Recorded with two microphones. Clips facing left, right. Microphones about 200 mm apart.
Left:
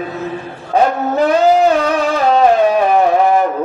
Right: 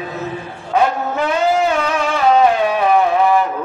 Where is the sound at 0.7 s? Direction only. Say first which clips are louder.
Left 3 dB; 35° left (ahead or behind).